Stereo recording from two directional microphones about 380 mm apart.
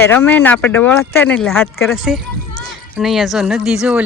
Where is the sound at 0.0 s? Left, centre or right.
Centre.